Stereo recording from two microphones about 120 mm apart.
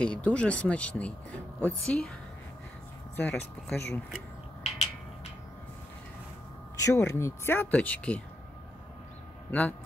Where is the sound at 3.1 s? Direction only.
10° left (ahead or behind).